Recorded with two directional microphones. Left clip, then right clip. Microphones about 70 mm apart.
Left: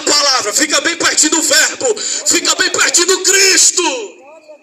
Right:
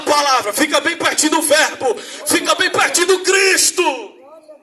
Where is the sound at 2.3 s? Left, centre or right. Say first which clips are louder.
Left 1 dB; right.